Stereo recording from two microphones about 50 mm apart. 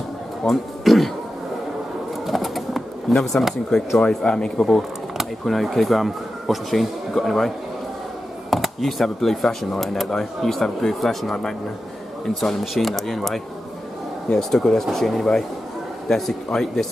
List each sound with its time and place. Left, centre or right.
0.5 s a sound: centre
2.2 s pigeon: centre
3.1 s speech: centre
4.1 s speech: centre
5.4 s speech: centre
12.4 s speech: centre